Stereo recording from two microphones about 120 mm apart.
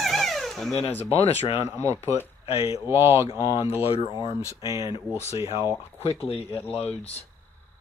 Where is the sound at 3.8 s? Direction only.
55° left (ahead or behind).